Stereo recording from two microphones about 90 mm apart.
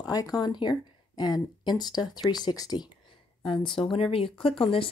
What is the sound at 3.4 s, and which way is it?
Speech, 70° left (ahead or behind).